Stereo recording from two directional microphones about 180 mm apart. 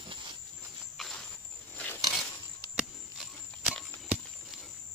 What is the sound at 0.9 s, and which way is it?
Cricket, centre (ahead or behind).